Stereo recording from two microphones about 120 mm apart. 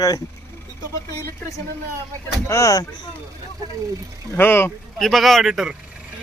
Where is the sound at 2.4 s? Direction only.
25° left (ahead or behind).